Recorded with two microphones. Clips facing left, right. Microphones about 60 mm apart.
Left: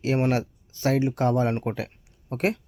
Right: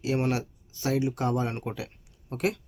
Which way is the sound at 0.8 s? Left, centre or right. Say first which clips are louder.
Left 4 dB; left.